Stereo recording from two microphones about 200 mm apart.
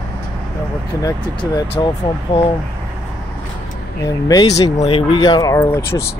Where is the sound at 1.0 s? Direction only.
25° left (ahead or behind).